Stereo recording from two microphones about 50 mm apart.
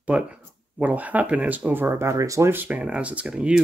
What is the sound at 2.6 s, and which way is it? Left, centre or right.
Speech, right.